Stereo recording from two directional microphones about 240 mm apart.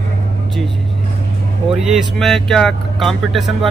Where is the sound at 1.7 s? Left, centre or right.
Centre.